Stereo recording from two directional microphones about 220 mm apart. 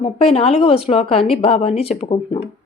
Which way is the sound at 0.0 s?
25° left (ahead or behind).